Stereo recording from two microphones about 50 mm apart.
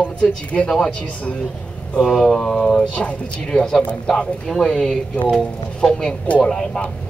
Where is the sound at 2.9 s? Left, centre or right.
Centre.